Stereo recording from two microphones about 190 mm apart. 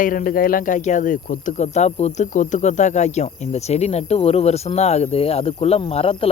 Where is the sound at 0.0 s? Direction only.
45° left (ahead or behind).